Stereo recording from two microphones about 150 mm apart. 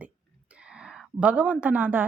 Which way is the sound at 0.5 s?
5° right (ahead or behind).